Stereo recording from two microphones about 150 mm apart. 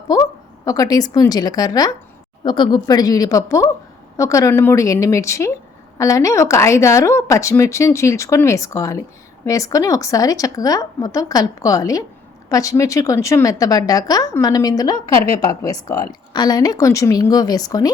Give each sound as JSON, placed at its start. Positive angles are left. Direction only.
{"t": 0.6, "sound": "a woman's voice", "side_deg": 25}